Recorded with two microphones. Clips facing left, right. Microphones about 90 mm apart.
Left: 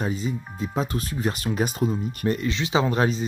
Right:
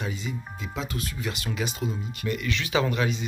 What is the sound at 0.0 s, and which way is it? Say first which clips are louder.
Speech: left 6 dB; 40° left (ahead or behind).